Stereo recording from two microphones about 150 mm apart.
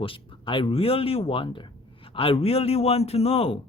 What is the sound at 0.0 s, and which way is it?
Speech, 35° left (ahead or behind).